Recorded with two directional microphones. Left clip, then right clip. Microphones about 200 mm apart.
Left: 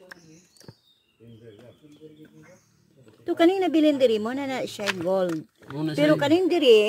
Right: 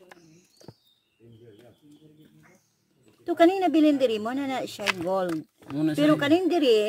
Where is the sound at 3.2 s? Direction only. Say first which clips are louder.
Even; centre (ahead or behind).